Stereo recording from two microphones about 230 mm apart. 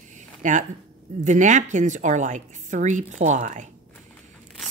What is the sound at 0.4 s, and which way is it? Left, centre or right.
Speech, right.